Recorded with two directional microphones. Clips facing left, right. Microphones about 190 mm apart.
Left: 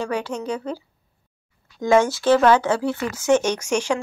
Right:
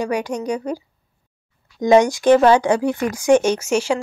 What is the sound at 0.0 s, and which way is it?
Speech, 15° right (ahead or behind).